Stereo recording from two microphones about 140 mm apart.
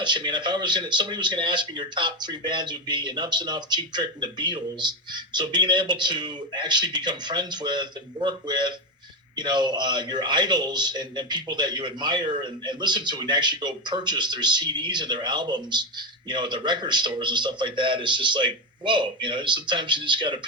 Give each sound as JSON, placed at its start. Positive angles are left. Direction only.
{"t": 0.0, "sound": "speech", "side_deg": -35}